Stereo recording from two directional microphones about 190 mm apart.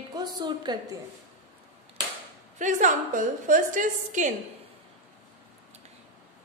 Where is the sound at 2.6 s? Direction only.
40° right (ahead or behind).